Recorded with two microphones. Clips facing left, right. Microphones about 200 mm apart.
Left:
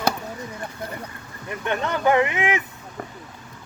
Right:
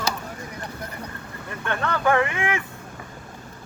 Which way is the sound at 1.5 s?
20° left (ahead or behind).